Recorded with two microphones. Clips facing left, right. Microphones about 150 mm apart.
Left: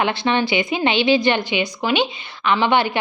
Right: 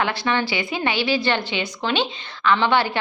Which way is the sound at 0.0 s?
20° left (ahead or behind).